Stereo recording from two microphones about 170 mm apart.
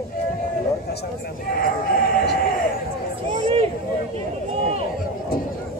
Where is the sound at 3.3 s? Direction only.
35° right (ahead or behind).